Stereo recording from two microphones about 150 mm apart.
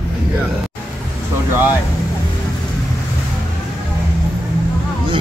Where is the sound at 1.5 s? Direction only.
15° right (ahead or behind).